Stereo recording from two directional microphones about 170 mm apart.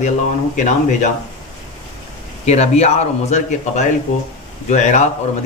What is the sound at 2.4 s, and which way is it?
Speech, 40° left (ahead or behind).